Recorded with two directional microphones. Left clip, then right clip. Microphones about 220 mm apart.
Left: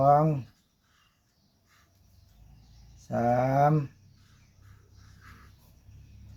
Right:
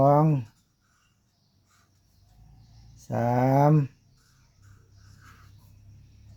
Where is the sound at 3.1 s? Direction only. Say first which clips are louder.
Right 1 dB; 50° right (ahead or behind).